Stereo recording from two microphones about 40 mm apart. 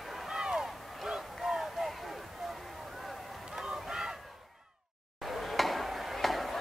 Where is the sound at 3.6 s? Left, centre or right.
Right.